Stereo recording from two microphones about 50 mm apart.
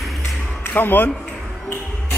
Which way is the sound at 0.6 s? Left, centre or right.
Left.